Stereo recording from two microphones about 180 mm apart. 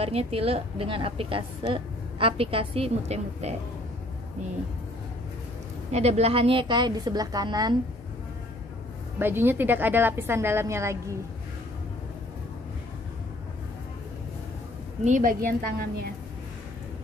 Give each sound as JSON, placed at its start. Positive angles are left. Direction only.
{"t": 0.0, "sound": "a woman's voice", "side_deg": -35}
{"t": 5.9, "sound": "a woman's voice", "side_deg": -35}
{"t": 9.2, "sound": "a woman's voice", "side_deg": -10}
{"t": 15.0, "sound": "a woman's voice", "side_deg": -50}